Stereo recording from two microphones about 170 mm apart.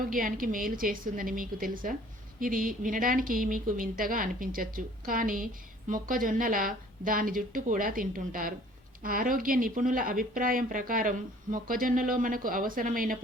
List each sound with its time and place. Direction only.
0.1 s a woman's voice: 55° right (ahead or behind)